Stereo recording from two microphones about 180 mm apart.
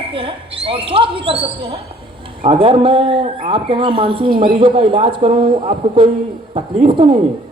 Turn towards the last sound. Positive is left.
turn(degrees=-30)  # may be behind; listen again after turning